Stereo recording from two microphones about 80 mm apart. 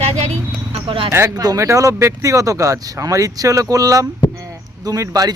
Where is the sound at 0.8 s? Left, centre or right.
Right.